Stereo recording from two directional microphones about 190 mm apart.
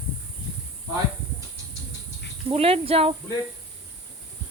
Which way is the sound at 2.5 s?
30° right (ahead or behind).